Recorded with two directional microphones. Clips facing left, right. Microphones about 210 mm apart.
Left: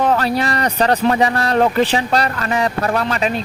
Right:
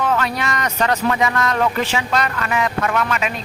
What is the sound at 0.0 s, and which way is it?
Speech, 35° left (ahead or behind).